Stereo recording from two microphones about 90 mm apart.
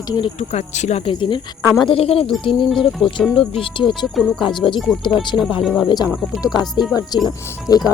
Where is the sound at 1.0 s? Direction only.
70° left (ahead or behind).